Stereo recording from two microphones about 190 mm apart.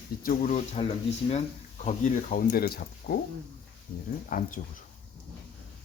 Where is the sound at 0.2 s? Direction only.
45° left (ahead or behind).